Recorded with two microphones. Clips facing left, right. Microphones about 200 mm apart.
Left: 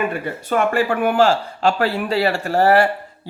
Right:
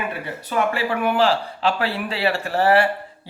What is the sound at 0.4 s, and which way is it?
Speech, 50° left (ahead or behind).